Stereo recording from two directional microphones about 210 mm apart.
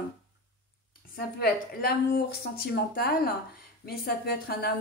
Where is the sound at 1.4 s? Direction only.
45° left (ahead or behind).